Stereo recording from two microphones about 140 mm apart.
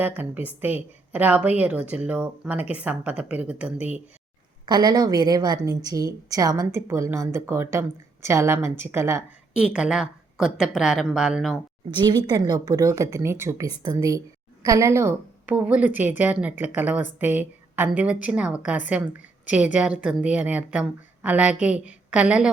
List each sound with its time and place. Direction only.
0.0 s a woman's voice: 15° right (ahead or behind)
4.6 s a woman's voice: 30° right (ahead or behind)
9.6 s a woman's voice: 5° right (ahead or behind)
11.9 s a woman's voice: 30° right (ahead or behind); by 22.4 s 5° right (ahead or behind)